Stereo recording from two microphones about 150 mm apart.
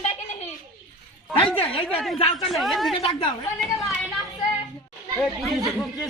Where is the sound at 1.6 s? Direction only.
40° left (ahead or behind).